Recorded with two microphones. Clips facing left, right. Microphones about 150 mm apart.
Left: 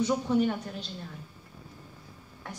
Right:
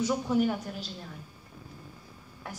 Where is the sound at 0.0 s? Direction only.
5° right (ahead or behind).